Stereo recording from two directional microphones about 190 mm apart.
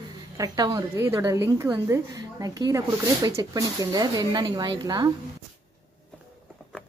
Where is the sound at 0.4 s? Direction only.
20° right (ahead or behind).